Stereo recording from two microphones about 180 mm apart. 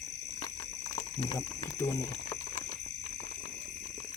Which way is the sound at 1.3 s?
15° left (ahead or behind).